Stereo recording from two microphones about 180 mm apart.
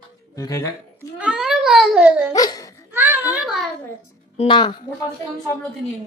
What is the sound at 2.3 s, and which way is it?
Speech, 20° left (ahead or behind).